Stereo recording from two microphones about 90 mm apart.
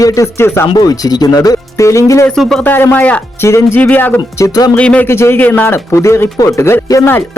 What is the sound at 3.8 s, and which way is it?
Speech, 20° left (ahead or behind).